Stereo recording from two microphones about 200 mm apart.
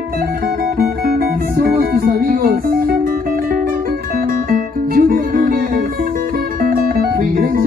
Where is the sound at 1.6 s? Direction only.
50° right (ahead or behind).